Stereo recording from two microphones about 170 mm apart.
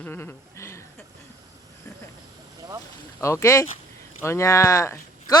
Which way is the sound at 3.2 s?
15° left (ahead or behind).